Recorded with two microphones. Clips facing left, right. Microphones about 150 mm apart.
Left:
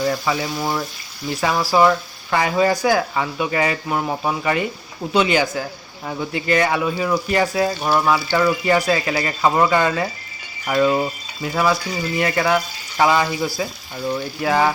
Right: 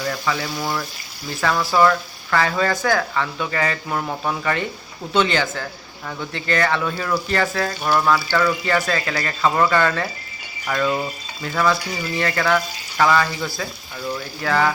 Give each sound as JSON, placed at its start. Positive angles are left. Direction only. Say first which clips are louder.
{"t": 0.1, "sound": "speech", "louder": "left 3 dB", "side_deg": 15}